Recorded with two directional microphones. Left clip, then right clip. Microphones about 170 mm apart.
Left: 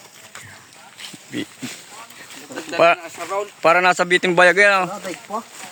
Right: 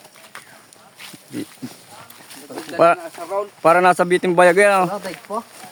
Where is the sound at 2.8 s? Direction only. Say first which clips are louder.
Even; 20° right (ahead or behind).